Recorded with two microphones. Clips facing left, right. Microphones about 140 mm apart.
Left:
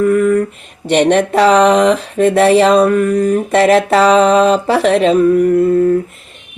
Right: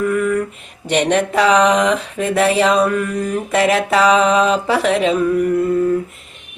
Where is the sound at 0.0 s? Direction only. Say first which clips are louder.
Left 6 dB; 40° left (ahead or behind).